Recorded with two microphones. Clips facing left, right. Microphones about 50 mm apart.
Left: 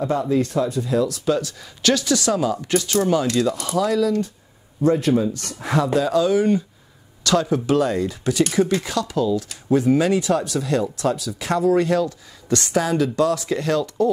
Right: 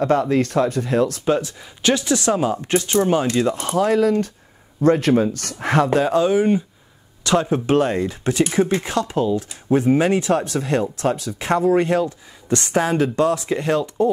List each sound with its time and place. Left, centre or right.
0.0 s speech: right
4.8 s speech: right
5.9 s speech: right